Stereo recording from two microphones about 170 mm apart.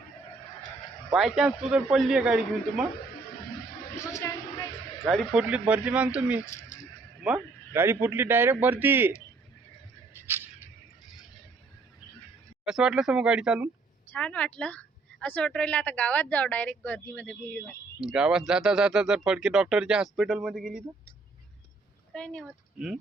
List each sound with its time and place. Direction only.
1.1 s speech: 5° right (ahead or behind)
4.2 s a sound: 20° left (ahead or behind)
5.0 s speech: centre (ahead or behind)
6.4 s speech: 15° left (ahead or behind)
7.3 s speech: 10° right (ahead or behind)
12.6 s speech: 5° right (ahead or behind)
14.1 s speech: 5° left (ahead or behind)
18.0 s speech: 5° right (ahead or behind)
22.1 s speech: 5° left (ahead or behind)